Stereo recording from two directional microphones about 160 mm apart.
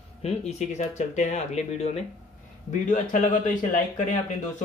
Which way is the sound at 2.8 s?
50° left (ahead or behind).